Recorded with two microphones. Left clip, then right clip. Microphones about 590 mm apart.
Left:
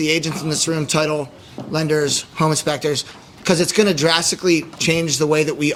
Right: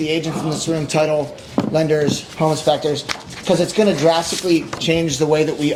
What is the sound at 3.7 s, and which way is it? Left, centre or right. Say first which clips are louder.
A man's voice: right 2 dB; left.